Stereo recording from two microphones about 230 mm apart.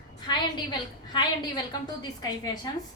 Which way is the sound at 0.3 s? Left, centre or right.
Centre.